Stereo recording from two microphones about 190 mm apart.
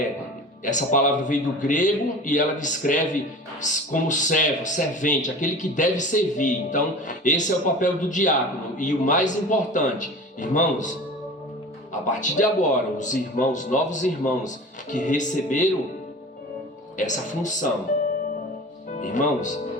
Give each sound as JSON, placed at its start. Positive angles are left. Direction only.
{"t": 0.6, "sound": "speech", "side_deg": 40}
{"t": 12.0, "sound": "speech", "side_deg": 40}
{"t": 17.0, "sound": "speech", "side_deg": 40}
{"t": 18.9, "sound": "speech", "side_deg": 40}